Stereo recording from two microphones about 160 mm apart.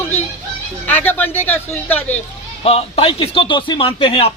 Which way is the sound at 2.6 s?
40° left (ahead or behind).